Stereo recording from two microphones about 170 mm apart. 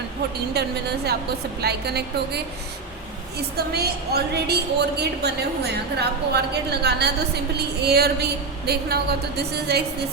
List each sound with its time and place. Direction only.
0.6 s a woman's voice: 75° right (ahead or behind)